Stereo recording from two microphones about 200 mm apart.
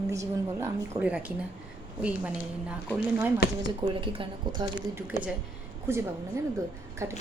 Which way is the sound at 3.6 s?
25° right (ahead or behind).